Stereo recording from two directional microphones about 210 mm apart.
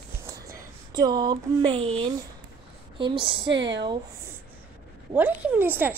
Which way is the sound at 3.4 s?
60° right (ahead or behind).